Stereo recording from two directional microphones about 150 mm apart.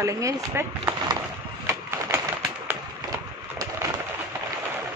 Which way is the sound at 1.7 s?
15° right (ahead or behind).